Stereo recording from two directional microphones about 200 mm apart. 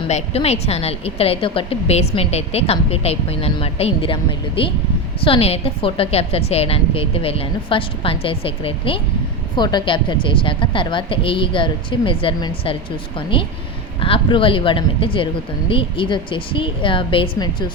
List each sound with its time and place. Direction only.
0.1 s a woman's voice: 30° left (ahead or behind)